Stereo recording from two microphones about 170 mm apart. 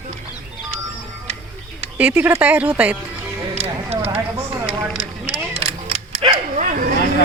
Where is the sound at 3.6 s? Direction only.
40° right (ahead or behind).